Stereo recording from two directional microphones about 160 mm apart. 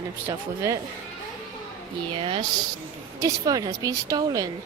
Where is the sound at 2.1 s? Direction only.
35° right (ahead or behind).